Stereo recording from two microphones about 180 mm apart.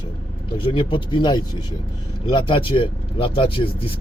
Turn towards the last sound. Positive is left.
turn(degrees=30)  # may be behind; listen again after turning